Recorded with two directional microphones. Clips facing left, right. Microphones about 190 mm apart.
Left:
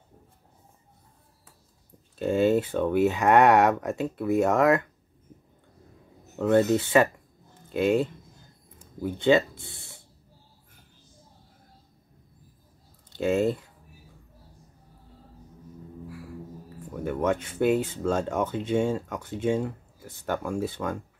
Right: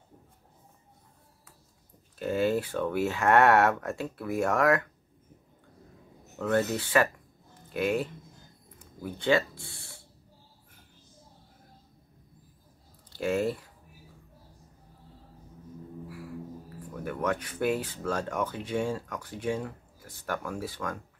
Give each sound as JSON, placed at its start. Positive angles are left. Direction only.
{"t": 2.1, "sound": "speech", "side_deg": 25}
{"t": 6.3, "sound": "speech", "side_deg": 25}
{"t": 13.1, "sound": "speech", "side_deg": 25}
{"t": 16.9, "sound": "speech", "side_deg": 25}